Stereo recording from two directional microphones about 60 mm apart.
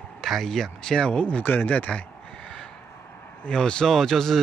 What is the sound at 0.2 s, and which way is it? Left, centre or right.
Speech, centre.